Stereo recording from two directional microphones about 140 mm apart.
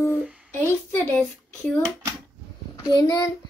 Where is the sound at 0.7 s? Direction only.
15° left (ahead or behind).